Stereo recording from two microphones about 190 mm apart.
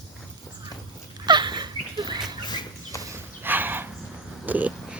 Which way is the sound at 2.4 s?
20° left (ahead or behind).